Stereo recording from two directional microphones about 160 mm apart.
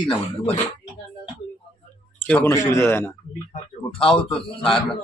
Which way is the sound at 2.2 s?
10° left (ahead or behind).